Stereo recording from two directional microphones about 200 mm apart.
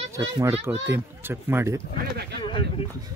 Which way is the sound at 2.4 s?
25° left (ahead or behind).